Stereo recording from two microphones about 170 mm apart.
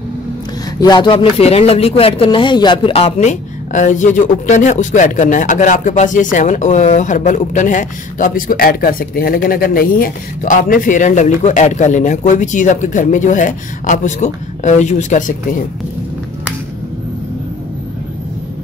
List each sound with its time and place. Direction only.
0.7 s speech: 25° left (ahead or behind)
1.4 s speech: 35° left (ahead or behind)